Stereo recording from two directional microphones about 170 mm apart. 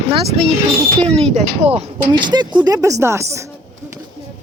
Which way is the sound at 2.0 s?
25° right (ahead or behind).